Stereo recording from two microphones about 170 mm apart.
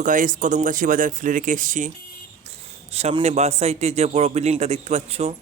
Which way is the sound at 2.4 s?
40° right (ahead or behind).